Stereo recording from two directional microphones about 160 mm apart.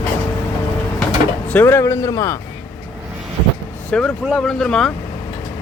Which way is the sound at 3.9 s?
5° left (ahead or behind).